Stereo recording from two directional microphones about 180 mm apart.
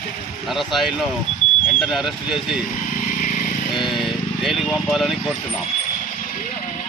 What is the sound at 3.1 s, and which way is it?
Vehicle, 45° left (ahead or behind).